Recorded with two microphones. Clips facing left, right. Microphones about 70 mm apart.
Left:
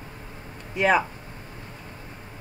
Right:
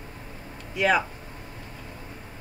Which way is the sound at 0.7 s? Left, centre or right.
Left.